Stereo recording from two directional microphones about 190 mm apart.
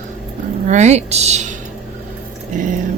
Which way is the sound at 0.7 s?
35° right (ahead or behind).